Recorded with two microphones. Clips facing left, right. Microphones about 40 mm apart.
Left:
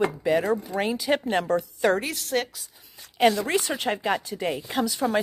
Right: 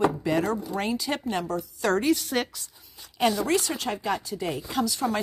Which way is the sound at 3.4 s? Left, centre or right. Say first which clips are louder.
Left 1 dB; left.